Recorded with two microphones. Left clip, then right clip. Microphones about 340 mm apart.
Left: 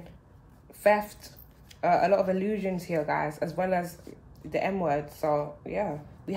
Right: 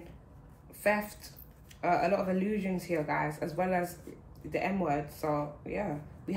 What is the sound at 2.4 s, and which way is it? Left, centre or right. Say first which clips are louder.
Speech: left 3 dB; left.